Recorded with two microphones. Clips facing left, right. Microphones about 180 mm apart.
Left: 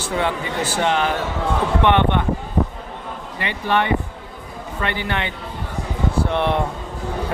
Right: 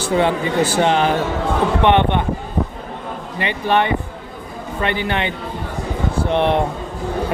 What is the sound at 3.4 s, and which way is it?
Speech, 20° right (ahead or behind).